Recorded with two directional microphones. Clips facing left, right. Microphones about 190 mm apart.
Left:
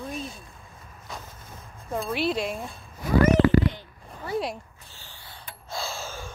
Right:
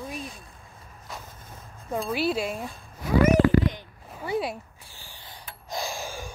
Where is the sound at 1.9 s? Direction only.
Centre (ahead or behind).